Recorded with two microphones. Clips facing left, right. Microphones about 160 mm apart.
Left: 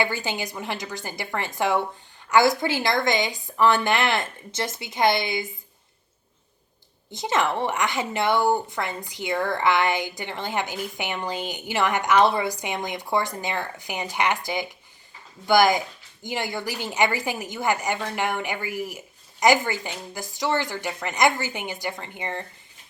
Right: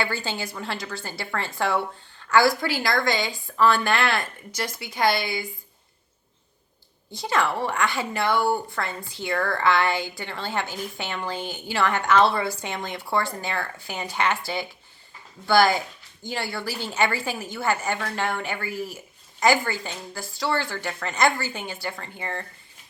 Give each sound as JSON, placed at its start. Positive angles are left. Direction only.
{"t": 0.0, "sound": "speech", "side_deg": 15}
{"t": 7.1, "sound": "a woman's voice", "side_deg": 20}